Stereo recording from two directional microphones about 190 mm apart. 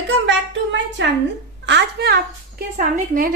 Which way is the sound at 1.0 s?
70° right (ahead or behind).